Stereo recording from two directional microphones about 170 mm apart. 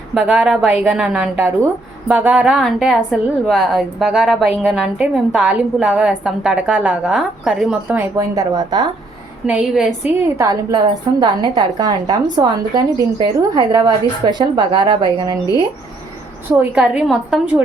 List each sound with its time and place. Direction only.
0.1 s a woman's voice: 5° right (ahead or behind)
8.1 s a woman's voice: 20° right (ahead or behind)
9.5 s a woman's voice: 5° right (ahead or behind)
10.2 s a woman's voice: 20° right (ahead or behind)
16.6 s a woman's voice: 5° right (ahead or behind)